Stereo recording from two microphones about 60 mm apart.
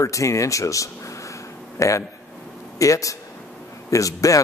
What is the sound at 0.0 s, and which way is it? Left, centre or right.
A man's voice, left.